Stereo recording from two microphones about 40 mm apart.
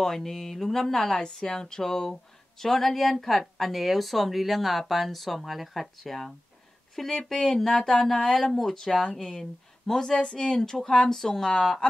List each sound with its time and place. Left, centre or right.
0.0 s speech: centre